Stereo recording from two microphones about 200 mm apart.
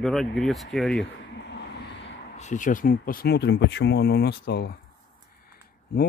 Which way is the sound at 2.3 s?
35° left (ahead or behind).